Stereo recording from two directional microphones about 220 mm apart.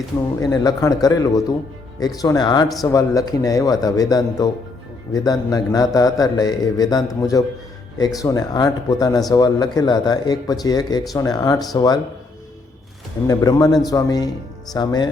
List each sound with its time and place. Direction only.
0.3 s a man's voice: 15° left (ahead or behind)
13.2 s a man's voice: 15° left (ahead or behind)